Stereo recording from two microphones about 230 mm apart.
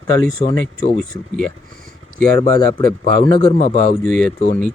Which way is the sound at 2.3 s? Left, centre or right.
Right.